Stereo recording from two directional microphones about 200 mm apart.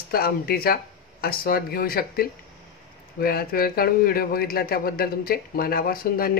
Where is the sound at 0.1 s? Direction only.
50° left (ahead or behind).